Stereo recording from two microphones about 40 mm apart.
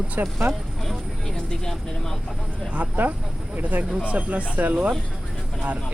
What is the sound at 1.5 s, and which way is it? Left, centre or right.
Speech, centre.